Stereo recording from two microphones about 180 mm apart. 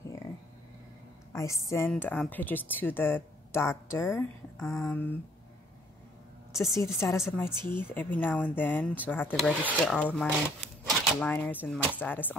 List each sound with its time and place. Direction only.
1.3 s speech: 15° left (ahead or behind)
6.5 s a woman's voice: centre (ahead or behind)
6.8 s speech: 15° left (ahead or behind)